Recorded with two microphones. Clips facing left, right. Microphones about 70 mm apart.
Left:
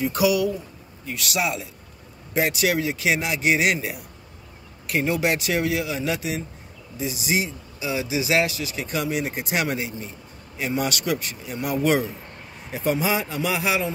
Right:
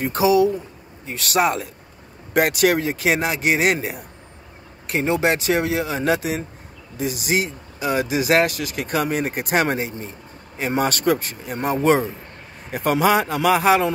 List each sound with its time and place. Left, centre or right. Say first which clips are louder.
0.0 s speech: right 4 dB; right
12.7 s speech: right 5 dB; right